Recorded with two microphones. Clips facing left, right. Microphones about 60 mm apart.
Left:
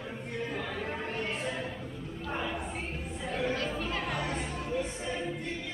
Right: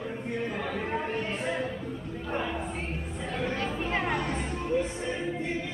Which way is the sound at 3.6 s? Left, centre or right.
Right.